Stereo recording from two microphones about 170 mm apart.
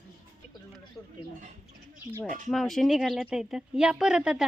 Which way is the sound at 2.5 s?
Centre (ahead or behind).